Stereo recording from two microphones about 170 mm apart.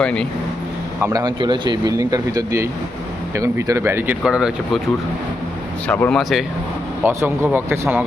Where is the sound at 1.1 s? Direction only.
25° right (ahead or behind); by 4.8 s 5° right (ahead or behind).